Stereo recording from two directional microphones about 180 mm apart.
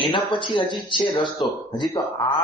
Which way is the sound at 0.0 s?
25° left (ahead or behind).